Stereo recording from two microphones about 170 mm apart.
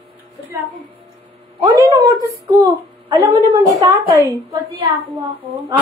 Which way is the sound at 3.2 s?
20° right (ahead or behind).